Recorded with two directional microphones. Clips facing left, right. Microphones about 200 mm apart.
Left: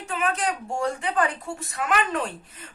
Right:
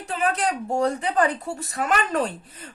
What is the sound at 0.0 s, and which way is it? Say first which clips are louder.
A woman's voice: right 2 dB; 35° right (ahead or behind).